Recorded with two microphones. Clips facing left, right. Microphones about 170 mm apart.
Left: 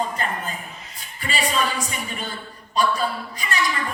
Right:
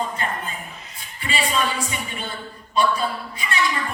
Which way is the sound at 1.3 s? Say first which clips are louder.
Right 1 dB; 40° left (ahead or behind).